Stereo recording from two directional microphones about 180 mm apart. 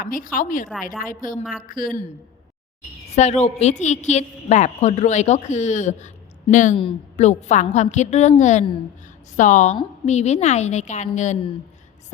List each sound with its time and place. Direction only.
0.0 s speech: 50° left (ahead or behind)
3.1 s a woman's voice: 40° left (ahead or behind)